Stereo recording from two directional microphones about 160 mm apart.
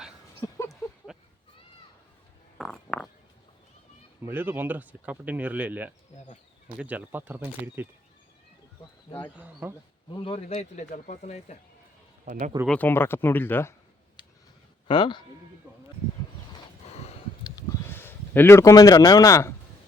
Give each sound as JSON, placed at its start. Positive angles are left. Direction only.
{"t": 0.4, "sound": "a sound", "side_deg": 20}
{"t": 1.1, "sound": "cat", "side_deg": -5}
{"t": 2.6, "sound": "a sound", "side_deg": 0}
{"t": 4.2, "sound": "speech", "side_deg": -10}
{"t": 9.3, "sound": "speech", "side_deg": -10}
{"t": 10.1, "sound": "speech", "side_deg": 30}
{"t": 12.2, "sound": "speech", "side_deg": -55}
{"t": 12.6, "sound": "speech", "side_deg": 10}
{"t": 14.8, "sound": "speech", "side_deg": 30}
{"t": 15.6, "sound": "sheep", "side_deg": -10}
{"t": 16.9, "sound": "a sound", "side_deg": 40}
{"t": 17.4, "sound": "a sound", "side_deg": 25}
{"t": 17.9, "sound": "speech", "side_deg": 15}